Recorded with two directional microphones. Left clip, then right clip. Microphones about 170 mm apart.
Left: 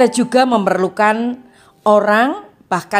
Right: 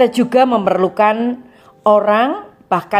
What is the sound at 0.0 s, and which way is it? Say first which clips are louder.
A woman's voice: right 1 dB; 30° left (ahead or behind).